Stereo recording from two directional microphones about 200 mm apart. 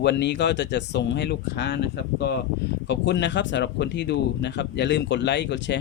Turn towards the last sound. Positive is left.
turn(degrees=60)  # may be behind; listen again after turning